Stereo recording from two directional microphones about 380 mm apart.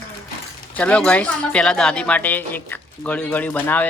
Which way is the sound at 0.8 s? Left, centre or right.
Centre.